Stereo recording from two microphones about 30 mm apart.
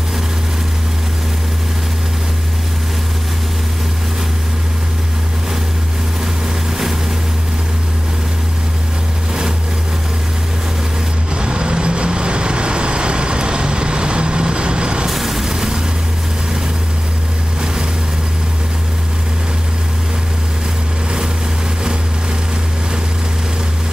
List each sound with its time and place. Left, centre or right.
11.3 s vehicle: right
15.0 s a sound: centre
15.5 s vehicle: right